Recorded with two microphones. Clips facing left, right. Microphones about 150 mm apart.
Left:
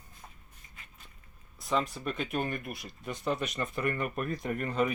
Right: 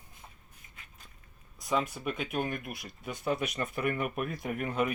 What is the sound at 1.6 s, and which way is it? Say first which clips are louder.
Speech: even; 5° right (ahead or behind).